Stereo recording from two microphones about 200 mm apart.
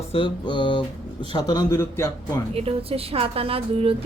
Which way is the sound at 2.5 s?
30° right (ahead or behind).